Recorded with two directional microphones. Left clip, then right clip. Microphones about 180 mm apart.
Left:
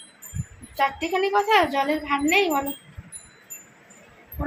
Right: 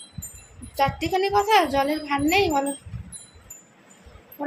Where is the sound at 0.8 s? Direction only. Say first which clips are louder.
Even; 15° right (ahead or behind).